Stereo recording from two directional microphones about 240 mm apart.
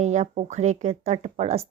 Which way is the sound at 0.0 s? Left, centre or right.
Right.